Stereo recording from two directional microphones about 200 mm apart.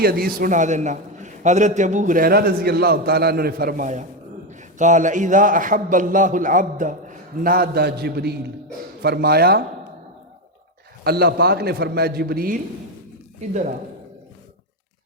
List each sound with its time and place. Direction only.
0.0 s a man's voice: 50° right (ahead or behind)
11.0 s a man's voice: 50° right (ahead or behind)
13.4 s a man's voice: 35° right (ahead or behind)